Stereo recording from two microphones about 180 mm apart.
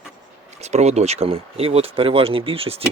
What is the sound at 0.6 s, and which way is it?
Speech, 40° right (ahead or behind).